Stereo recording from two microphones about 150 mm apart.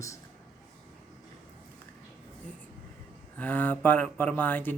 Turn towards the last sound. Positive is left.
turn(degrees=10)  # may be behind; listen again after turning